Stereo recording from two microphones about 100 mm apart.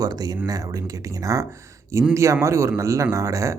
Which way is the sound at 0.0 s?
40° right (ahead or behind).